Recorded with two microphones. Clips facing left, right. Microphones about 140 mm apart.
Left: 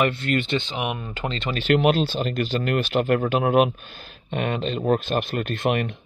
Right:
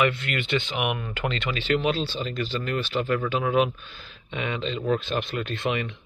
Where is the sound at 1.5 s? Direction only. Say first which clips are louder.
Left 6 dB; 55° left (ahead or behind).